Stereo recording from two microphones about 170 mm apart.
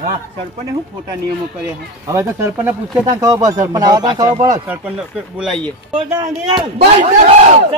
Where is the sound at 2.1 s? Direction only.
15° right (ahead or behind).